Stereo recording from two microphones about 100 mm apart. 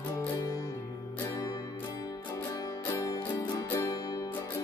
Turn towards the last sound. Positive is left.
turn(degrees=35)  # may be behind; listen again after turning